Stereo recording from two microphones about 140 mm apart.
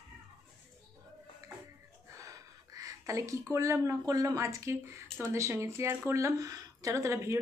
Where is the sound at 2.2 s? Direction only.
25° right (ahead or behind).